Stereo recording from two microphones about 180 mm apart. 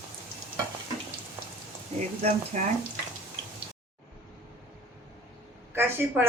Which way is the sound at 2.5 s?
45° right (ahead or behind).